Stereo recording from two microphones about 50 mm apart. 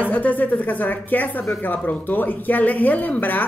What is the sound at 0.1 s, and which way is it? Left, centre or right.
Speech, left.